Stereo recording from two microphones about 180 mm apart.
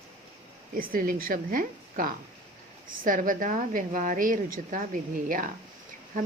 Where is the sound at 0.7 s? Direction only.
50° right (ahead or behind).